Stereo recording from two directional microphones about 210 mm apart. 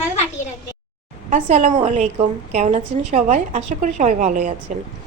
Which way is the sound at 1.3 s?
35° right (ahead or behind).